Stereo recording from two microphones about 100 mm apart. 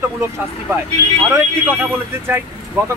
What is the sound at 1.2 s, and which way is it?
Speech, 20° right (ahead or behind).